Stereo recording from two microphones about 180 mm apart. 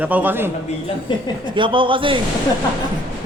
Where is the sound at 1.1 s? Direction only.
25° left (ahead or behind).